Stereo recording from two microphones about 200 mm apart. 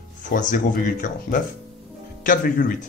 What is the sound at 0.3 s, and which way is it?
Speech, 40° left (ahead or behind).